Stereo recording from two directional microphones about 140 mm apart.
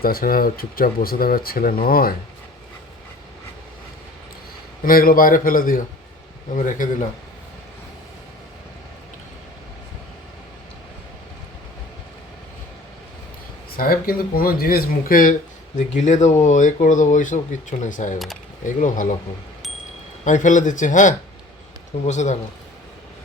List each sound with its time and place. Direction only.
0.0 s speech: 90° left
4.9 s speech: 90° left
6.6 s speech: 65° left (ahead or behind)
13.7 s speech: 90° left; by 19.0 s 65° left (ahead or behind)
20.2 s speech: 65° left (ahead or behind)